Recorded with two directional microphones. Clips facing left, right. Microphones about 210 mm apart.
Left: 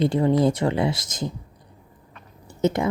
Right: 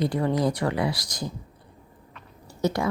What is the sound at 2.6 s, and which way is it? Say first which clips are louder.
Speech: left 3 dB; 20° left (ahead or behind).